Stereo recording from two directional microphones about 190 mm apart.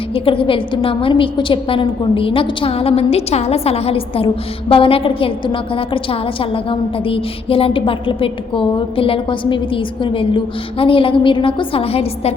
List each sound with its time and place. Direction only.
0.1 s a woman's voice: 30° left (ahead or behind)